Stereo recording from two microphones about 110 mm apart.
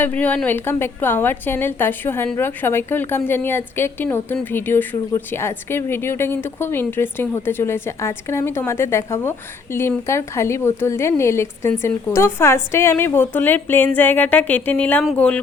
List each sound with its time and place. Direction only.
0.0 s a woman's voice: 15° left (ahead or behind)